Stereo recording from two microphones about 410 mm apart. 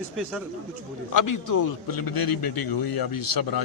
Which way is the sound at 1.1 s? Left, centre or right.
Left.